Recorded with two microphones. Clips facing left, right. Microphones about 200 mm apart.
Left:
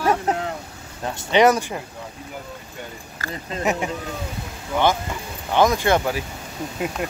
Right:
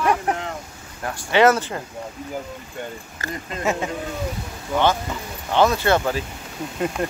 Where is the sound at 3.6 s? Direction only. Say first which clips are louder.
Left 1 dB; 15° left (ahead or behind).